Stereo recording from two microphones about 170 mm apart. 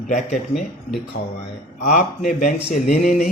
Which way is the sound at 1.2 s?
65° left (ahead or behind).